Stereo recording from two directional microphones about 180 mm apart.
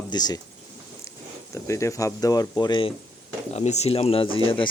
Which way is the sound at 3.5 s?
40° left (ahead or behind).